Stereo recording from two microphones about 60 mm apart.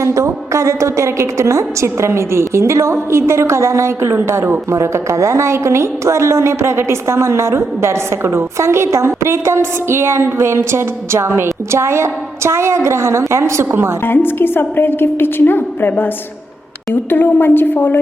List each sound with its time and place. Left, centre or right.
0.0 s a woman's voice: right
14.0 s a woman's voice: left